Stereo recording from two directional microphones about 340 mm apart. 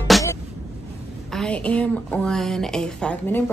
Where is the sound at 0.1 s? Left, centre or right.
Centre.